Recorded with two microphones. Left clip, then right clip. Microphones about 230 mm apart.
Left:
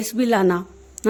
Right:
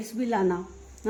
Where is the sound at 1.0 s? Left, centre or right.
Left.